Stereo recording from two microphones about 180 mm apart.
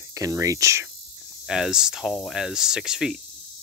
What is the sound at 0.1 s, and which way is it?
Speech, 20° right (ahead or behind).